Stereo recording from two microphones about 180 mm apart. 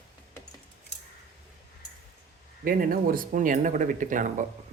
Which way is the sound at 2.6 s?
50° right (ahead or behind).